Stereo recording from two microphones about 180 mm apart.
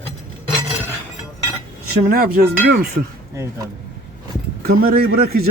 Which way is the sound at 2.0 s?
55° right (ahead or behind).